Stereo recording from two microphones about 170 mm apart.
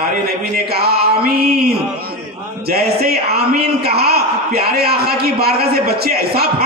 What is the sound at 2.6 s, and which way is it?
A man's voice, 65° right (ahead or behind).